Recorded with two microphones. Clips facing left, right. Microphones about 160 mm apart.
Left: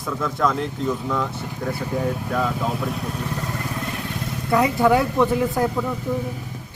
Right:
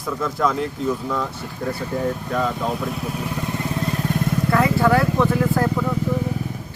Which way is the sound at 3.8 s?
35° right (ahead or behind).